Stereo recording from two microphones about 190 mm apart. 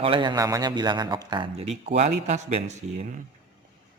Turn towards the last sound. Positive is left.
turn(degrees=-40)  # may be behind; listen again after turning